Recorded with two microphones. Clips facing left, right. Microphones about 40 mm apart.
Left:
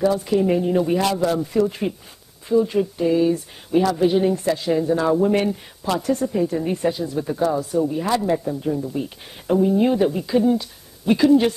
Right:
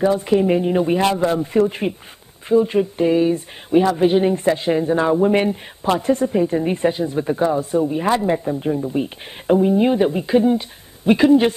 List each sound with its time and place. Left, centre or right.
0.0 s speech: right